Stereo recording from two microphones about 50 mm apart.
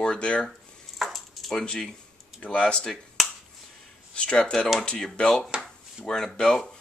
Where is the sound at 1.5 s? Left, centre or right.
Centre.